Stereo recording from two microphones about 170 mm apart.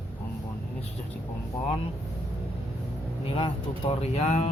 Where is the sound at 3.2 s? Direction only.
35° left (ahead or behind).